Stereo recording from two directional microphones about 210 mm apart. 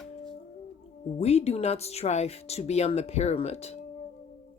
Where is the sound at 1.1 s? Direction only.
30° left (ahead or behind).